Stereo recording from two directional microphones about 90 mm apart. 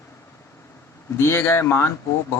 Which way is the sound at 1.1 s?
30° left (ahead or behind).